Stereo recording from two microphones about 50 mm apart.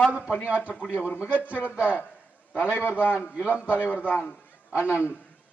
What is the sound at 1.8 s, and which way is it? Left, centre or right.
Speech, left.